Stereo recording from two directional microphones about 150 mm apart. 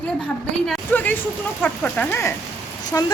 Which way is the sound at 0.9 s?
10° left (ahead or behind).